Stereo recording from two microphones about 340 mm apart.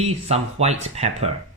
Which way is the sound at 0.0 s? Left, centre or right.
Centre.